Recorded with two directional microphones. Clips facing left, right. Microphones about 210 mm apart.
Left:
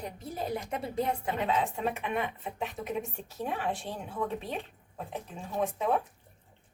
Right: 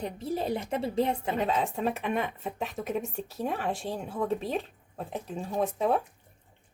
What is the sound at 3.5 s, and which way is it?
Speech, 40° right (ahead or behind).